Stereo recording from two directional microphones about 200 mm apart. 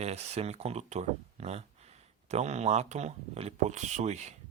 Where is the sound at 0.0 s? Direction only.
30° right (ahead or behind).